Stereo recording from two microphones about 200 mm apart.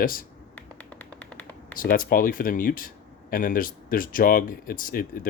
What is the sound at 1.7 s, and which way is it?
Speech, 45° left (ahead or behind).